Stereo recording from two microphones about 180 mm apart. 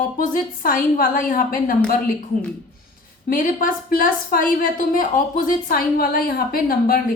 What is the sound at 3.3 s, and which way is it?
A woman's voice, 50° left (ahead or behind).